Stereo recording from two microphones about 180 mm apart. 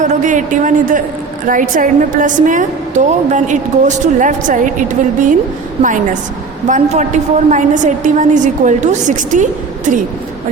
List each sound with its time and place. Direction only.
0.0 s a woman's voice: 45° right (ahead or behind)
6.7 s a woman's voice: 40° right (ahead or behind)